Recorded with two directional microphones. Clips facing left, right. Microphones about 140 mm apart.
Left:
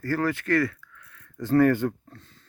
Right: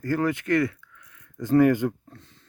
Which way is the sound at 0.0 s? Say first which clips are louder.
Right 1 dB; 20° right (ahead or behind).